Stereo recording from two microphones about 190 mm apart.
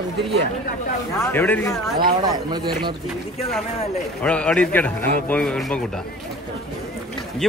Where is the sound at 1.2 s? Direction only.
10° left (ahead or behind).